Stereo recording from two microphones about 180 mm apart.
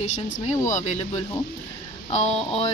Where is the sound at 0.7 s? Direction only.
45° left (ahead or behind).